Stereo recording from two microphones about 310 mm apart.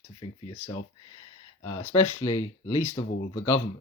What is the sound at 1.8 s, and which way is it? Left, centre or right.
Speech, centre.